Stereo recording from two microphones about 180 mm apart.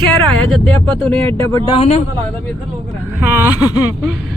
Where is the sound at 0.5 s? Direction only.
5° left (ahead or behind).